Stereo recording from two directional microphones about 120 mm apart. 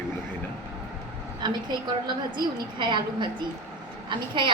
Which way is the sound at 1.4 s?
35° right (ahead or behind).